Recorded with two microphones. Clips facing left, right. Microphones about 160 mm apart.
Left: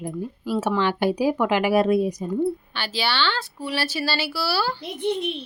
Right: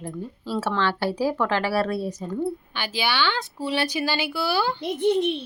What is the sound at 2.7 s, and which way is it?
Speech, 15° right (ahead or behind).